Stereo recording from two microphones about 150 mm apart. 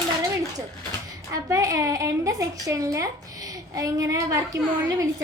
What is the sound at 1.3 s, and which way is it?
A woman's voice, 25° right (ahead or behind).